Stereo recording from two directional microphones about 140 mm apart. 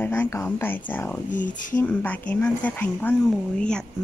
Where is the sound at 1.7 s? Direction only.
10° left (ahead or behind).